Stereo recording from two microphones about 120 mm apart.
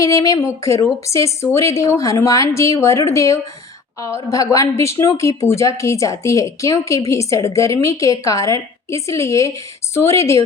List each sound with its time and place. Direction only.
0.0 s a woman's voice: 25° left (ahead or behind)